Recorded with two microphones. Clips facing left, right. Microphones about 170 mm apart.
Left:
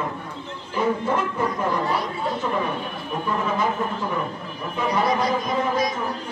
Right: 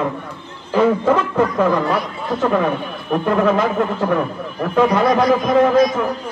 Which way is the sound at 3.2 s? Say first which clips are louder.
Right 8 dB; 90° right.